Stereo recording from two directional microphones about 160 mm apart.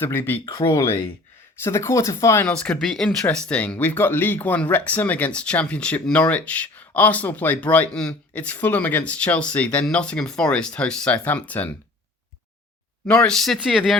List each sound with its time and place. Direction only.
0.0 s speech: 15° left (ahead or behind)
2.5 s speech: 5° left (ahead or behind)
13.1 s speech: 5° left (ahead or behind)